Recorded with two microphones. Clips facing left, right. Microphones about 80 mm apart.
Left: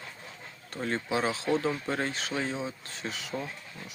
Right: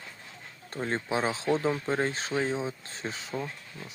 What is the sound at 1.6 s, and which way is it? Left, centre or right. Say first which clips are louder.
Speech: right 2 dB; centre.